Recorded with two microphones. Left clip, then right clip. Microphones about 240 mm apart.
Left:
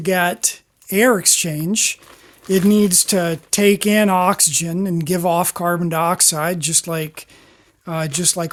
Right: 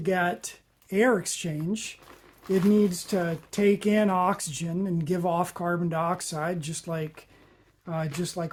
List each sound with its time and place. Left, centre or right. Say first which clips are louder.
0.0 s speech: left 9 dB; left